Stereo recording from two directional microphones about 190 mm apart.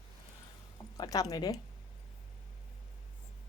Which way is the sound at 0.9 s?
20° left (ahead or behind).